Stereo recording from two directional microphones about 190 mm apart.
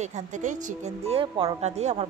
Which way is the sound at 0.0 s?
40° right (ahead or behind).